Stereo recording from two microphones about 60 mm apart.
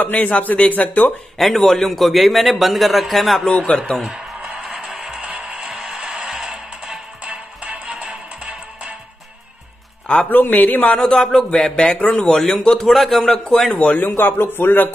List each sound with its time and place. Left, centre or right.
0.0 s speech: left
1.4 s a man's voice: centre
3.4 s a man's voice: centre
4.1 s music: right
4.6 s music: centre
5.3 s music: centre
7.2 s music: right
10.3 s speech: left
11.0 s a man's voice: centre
13.7 s speech: left